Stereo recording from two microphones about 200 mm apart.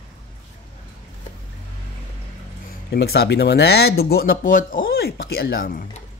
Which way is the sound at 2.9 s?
55° left (ahead or behind).